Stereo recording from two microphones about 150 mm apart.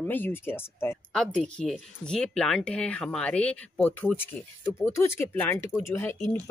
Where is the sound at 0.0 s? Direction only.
15° left (ahead or behind).